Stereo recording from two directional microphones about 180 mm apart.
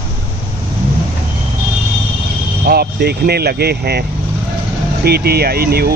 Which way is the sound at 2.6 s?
60° right (ahead or behind).